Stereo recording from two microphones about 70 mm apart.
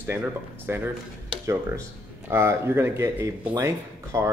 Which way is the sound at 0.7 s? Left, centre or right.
Right.